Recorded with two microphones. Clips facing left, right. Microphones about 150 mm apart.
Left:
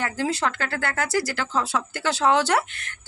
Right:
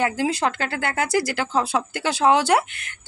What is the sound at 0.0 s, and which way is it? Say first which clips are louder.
Speech: right 3 dB; 15° right (ahead or behind).